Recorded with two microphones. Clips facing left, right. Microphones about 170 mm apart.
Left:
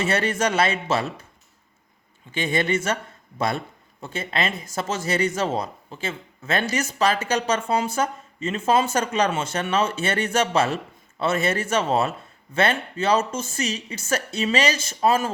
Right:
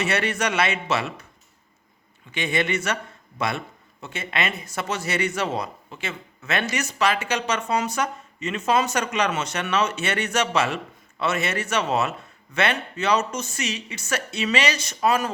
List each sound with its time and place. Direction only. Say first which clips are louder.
0.0 s speech: left 2 dB; 30° left (ahead or behind)
2.3 s speech: left 2 dB; 30° left (ahead or behind)